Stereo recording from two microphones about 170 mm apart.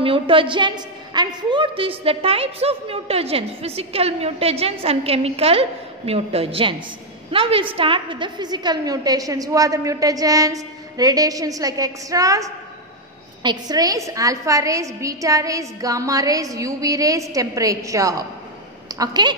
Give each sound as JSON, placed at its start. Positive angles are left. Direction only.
{"t": 0.0, "sound": "a woman's voice", "side_deg": -30}